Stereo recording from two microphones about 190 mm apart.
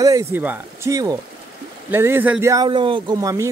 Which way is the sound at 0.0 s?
15° right (ahead or behind).